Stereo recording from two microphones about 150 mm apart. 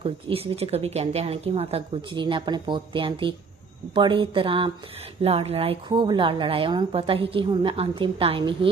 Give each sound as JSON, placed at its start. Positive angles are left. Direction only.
{"t": 0.0, "sound": "a woman's voice", "side_deg": -40}